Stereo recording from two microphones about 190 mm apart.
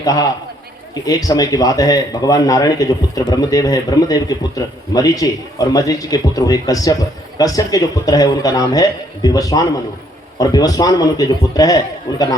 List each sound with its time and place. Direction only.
0.0 s a man's voice: 20° left (ahead or behind)